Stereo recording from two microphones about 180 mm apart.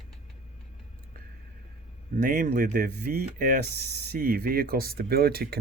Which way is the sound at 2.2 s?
45° right (ahead or behind).